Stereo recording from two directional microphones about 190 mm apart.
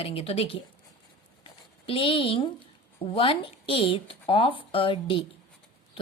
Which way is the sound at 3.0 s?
30° left (ahead or behind).